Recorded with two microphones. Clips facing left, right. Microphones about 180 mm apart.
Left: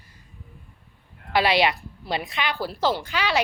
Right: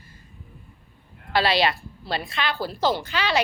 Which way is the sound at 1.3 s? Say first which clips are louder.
Left 1 dB; 20° left (ahead or behind).